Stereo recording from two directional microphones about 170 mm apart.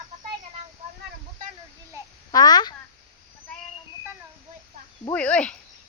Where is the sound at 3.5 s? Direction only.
5° left (ahead or behind).